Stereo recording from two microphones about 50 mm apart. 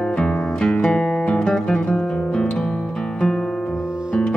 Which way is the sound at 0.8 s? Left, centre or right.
Left.